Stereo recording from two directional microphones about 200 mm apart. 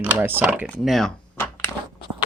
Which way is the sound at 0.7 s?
Centre (ahead or behind).